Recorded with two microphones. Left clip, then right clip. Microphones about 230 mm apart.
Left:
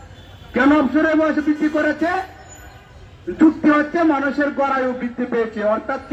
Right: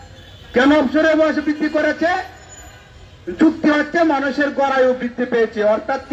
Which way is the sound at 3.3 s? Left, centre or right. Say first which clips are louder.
Even; right.